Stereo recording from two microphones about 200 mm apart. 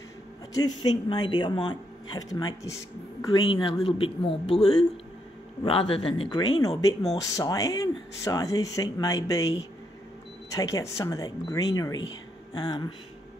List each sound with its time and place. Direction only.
0.6 s speech: 20° left (ahead or behind)
5.6 s speech: 25° left (ahead or behind)